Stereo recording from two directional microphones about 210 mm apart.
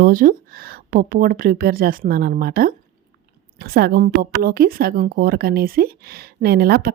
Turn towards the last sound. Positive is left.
turn(degrees=-45)  # may be behind; listen again after turning